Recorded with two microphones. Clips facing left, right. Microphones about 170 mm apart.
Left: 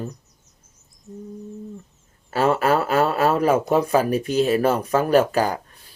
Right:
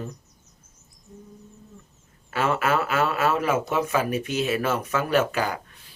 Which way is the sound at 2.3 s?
35° left (ahead or behind).